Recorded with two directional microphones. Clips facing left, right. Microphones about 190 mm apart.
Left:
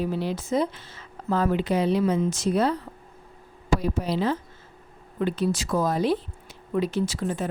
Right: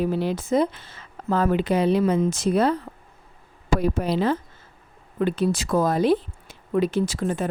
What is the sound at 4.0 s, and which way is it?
Speech, 55° right (ahead or behind).